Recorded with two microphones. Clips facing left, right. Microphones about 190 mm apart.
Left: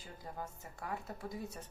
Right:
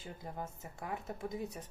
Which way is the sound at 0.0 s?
20° right (ahead or behind).